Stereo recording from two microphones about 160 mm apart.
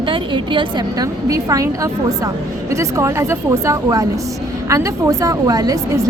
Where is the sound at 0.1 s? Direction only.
30° right (ahead or behind).